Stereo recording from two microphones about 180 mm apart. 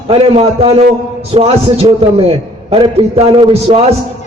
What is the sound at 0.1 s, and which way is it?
A man's voice, 30° right (ahead or behind).